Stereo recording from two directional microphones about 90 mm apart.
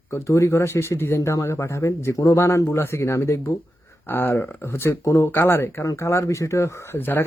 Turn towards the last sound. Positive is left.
turn(degrees=25)  # may be behind; listen again after turning